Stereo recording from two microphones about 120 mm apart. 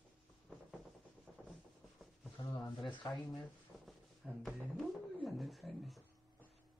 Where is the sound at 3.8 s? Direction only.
Centre (ahead or behind).